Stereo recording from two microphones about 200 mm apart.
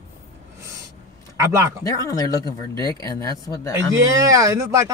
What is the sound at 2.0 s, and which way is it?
Speech, 15° left (ahead or behind).